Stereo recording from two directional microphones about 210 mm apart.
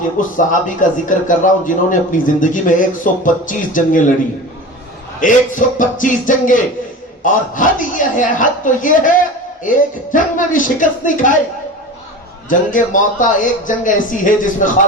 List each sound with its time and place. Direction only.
0.2 s a man's voice: 40° left (ahead or behind)
5.2 s a man's voice: 40° left (ahead or behind)
12.5 s a man's voice: 40° left (ahead or behind)